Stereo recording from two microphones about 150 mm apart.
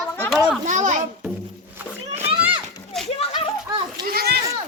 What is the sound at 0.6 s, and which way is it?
Speech, 55° right (ahead or behind).